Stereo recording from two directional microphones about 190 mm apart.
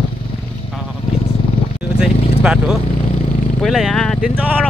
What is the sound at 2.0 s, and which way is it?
Speech, 5° right (ahead or behind).